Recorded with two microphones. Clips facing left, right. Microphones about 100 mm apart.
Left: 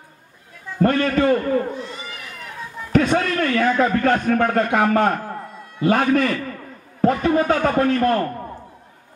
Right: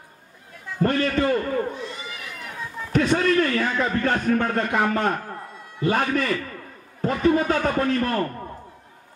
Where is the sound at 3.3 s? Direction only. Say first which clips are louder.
Left 2 dB; 55° left (ahead or behind).